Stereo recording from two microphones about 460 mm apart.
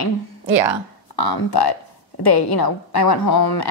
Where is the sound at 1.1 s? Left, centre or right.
Left.